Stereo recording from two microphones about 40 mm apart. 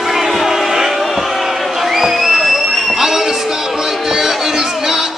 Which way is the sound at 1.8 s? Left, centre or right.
Centre.